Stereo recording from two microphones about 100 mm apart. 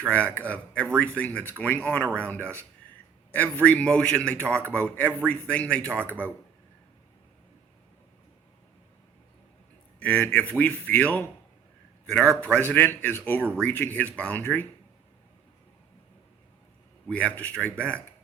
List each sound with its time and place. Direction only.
0.1 s a man's voice: 15° left (ahead or behind)
10.0 s a man's voice: 20° left (ahead or behind)
12.4 s a man's voice: 15° left (ahead or behind)
17.1 s a man's voice: 15° left (ahead or behind)